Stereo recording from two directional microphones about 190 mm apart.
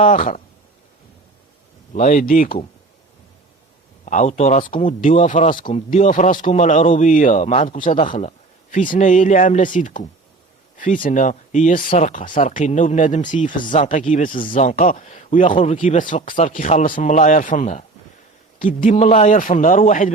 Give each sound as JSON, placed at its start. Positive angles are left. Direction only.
{"t": 0.0, "sound": "speech", "side_deg": 45}
{"t": 1.9, "sound": "speech", "side_deg": 40}
{"t": 4.0, "sound": "speech", "side_deg": 40}